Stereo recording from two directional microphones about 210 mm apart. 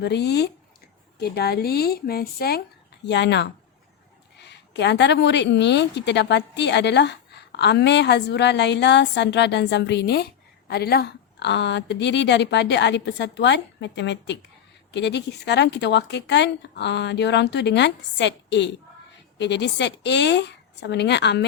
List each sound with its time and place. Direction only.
0.0 s a woman's voice: 50° left (ahead or behind)